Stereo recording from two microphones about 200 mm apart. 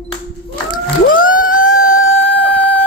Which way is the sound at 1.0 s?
45° left (ahead or behind).